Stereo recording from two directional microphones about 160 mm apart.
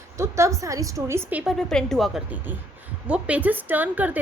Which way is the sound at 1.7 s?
5° left (ahead or behind).